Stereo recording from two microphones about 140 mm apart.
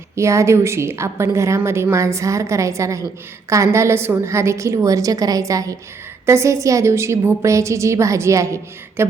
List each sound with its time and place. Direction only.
0.2 s a woman's voice: 20° right (ahead or behind)